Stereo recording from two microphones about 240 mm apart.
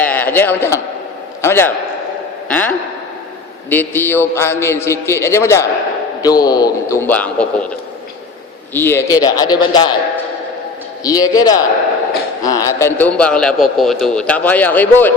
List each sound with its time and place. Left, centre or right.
0.0 s a man's voice: centre
8.7 s a man's voice: centre
11.0 s a man's voice: centre